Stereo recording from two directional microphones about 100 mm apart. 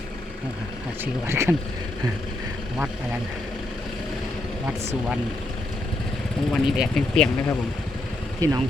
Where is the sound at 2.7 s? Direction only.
5° right (ahead or behind).